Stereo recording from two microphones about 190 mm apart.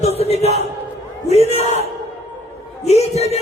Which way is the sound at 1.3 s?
35° left (ahead or behind).